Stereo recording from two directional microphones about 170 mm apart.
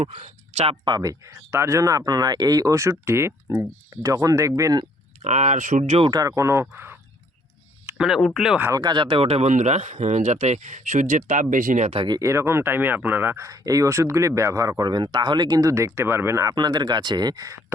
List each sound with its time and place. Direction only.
0.0 s speech: 40° right (ahead or behind); by 4.9 s 20° right (ahead or behind)
5.2 s speech: 45° right (ahead or behind)
6.1 s speech: 20° right (ahead or behind); by 8.6 s centre (ahead or behind)
8.6 s speech: 20° right (ahead or behind); by 12.0 s 40° right (ahead or behind)
12.0 s speech: 20° right (ahead or behind)